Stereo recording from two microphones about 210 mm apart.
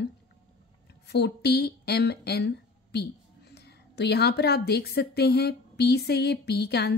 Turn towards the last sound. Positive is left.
turn(degrees=50)  # may be behind; listen again after turning